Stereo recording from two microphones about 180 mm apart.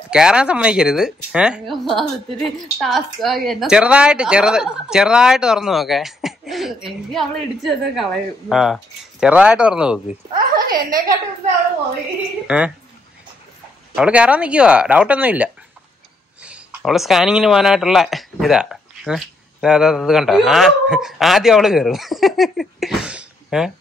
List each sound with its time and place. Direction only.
0.1 s speech: 5° right (ahead or behind)
10.3 s a woman's voice: 50° right (ahead or behind)
12.4 s speech: 5° right (ahead or behind)
13.9 s speech: 5° right (ahead or behind)